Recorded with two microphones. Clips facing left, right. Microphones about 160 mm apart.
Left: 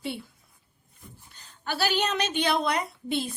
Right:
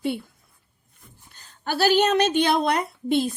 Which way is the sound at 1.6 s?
45° right (ahead or behind).